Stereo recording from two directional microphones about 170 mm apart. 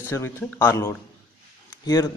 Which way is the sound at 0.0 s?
15° left (ahead or behind).